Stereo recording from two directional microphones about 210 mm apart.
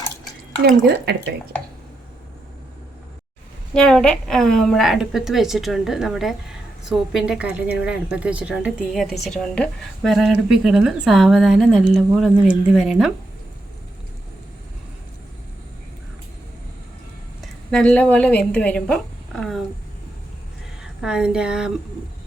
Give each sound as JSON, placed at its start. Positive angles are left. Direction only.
{"t": 0.9, "sound": "speech", "side_deg": -50}
{"t": 3.8, "sound": "a woman's voice", "side_deg": 5}
{"t": 17.7, "sound": "a woman's voice", "side_deg": 5}
{"t": 20.8, "sound": "speech", "side_deg": -5}